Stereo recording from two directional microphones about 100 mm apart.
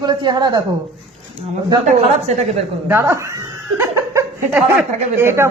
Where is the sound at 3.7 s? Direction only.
25° right (ahead or behind).